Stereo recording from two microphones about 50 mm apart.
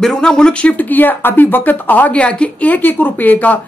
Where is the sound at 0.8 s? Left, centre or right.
Left.